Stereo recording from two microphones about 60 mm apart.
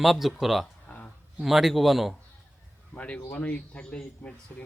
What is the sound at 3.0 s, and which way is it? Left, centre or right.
Speech, left.